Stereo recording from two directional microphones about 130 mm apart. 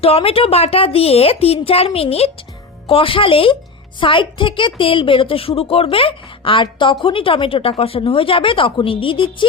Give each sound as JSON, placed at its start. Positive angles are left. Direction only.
{"t": 0.0, "sound": "a woman's voice", "side_deg": 50}